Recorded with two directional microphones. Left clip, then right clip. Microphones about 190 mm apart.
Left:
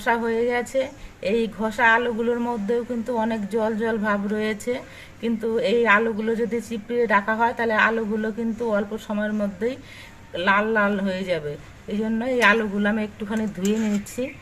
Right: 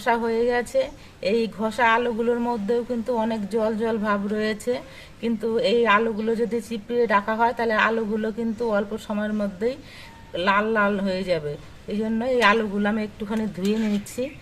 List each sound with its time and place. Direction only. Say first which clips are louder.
0.0 s a woman's voice: even; 5° right (ahead or behind)